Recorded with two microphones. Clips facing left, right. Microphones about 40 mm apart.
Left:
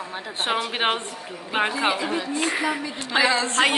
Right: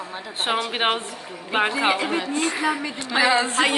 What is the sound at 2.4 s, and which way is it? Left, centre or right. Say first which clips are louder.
Speech: even; left.